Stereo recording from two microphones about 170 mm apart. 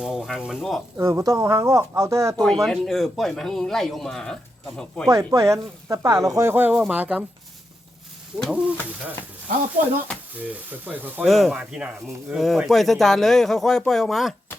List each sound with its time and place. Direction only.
0.0 s speech: 5° right (ahead or behind)
0.9 s speech: 15° right (ahead or behind)
2.3 s speech: 5° left (ahead or behind)
5.0 s speech: 20° right (ahead or behind)
8.4 s speech: 5° right (ahead or behind)
10.7 s speech: 10° right (ahead or behind)
11.2 s speech: centre (ahead or behind)